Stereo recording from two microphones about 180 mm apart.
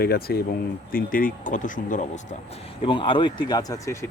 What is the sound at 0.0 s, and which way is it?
Speech, 60° left (ahead or behind).